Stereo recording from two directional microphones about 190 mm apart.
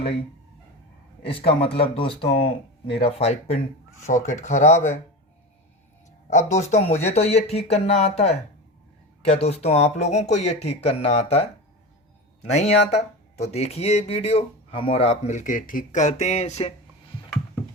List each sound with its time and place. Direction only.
1.2 s speech: 30° left (ahead or behind)
6.3 s speech: 40° left (ahead or behind)